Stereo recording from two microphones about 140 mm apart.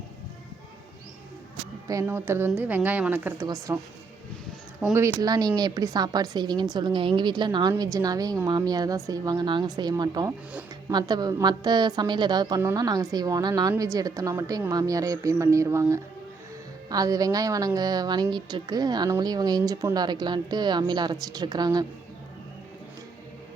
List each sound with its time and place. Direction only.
1.9 s speech: 20° right (ahead or behind)
3.4 s a woman's voice: 25° right (ahead or behind)
4.9 s a woman's voice: 25° right (ahead or behind)